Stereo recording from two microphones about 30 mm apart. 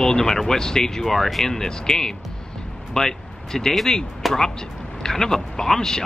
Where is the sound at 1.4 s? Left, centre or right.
Centre.